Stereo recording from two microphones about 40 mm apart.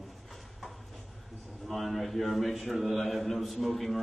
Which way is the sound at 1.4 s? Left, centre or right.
Centre.